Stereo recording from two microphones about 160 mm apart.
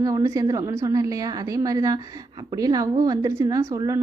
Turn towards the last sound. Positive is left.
turn(degrees=-20)  # may be behind; listen again after turning